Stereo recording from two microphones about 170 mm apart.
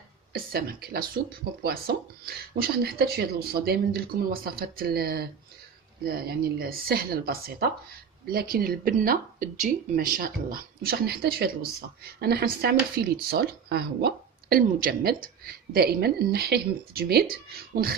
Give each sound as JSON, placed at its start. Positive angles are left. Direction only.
{"t": 0.3, "sound": "speech", "side_deg": -60}
{"t": 2.2, "sound": "speech", "side_deg": -65}